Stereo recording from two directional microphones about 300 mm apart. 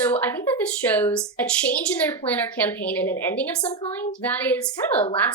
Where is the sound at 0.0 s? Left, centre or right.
Centre.